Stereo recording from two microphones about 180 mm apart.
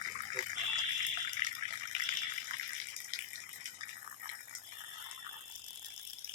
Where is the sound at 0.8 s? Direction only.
45° right (ahead or behind).